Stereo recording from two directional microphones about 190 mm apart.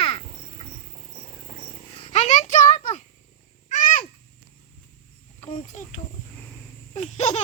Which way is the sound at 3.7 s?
40° left (ahead or behind).